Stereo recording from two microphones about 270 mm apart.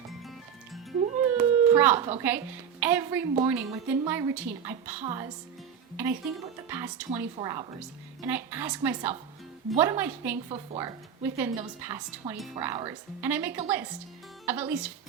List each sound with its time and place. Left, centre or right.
0.1 s music: centre
1.4 s a sound: centre
2.0 s a woman's voice: right
2.2 s a woman's voice: centre